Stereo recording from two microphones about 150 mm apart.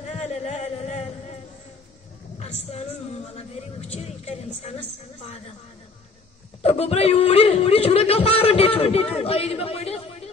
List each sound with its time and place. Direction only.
0.1 s a sound: 45° left (ahead or behind)
2.3 s speech: 45° left (ahead or behind)
6.6 s speech: 45° left (ahead or behind)